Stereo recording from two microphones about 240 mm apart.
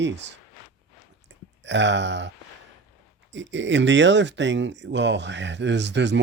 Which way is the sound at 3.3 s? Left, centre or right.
Right.